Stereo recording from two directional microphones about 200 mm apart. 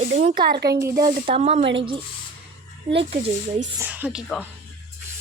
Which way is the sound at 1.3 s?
30° right (ahead or behind).